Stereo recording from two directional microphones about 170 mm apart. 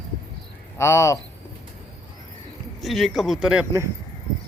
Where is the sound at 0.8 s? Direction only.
15° left (ahead or behind).